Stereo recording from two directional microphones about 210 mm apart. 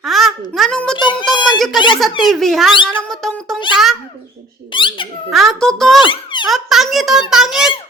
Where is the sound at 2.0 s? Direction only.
Centre (ahead or behind).